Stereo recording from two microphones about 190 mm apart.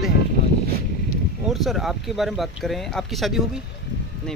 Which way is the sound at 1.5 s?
Centre (ahead or behind).